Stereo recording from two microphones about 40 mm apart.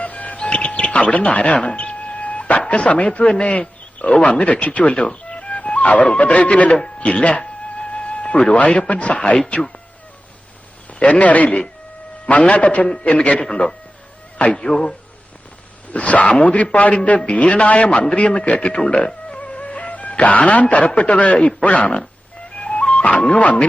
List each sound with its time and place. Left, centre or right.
0.0 s music: left
0.3 s speech: left
6.8 s music: left
8.5 s a man's voice: left
11.0 s a man's voice: left
13.4 s speech: centre
15.9 s a man's voice: left
22.5 s music: left